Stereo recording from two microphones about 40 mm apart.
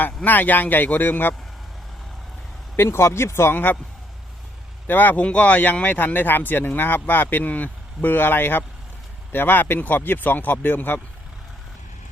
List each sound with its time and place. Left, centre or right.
0.3 s speech: left
2.7 s speech: left
4.9 s speech: left
5.2 s speech: left